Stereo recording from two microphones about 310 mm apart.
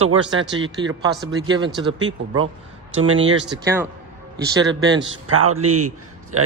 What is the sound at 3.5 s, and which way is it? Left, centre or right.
Speech, centre.